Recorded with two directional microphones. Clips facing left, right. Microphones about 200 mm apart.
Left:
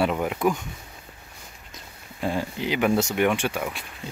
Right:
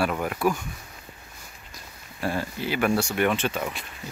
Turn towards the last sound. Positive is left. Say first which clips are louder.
# left 1 dB
turn(degrees=10)  # may be behind; listen again after turning